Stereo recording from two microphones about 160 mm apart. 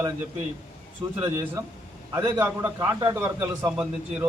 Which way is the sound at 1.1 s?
15° right (ahead or behind).